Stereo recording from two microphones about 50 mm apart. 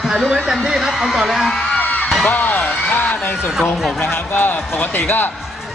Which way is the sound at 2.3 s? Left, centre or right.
Left.